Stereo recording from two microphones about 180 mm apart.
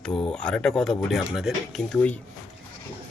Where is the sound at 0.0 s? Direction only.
5° left (ahead or behind).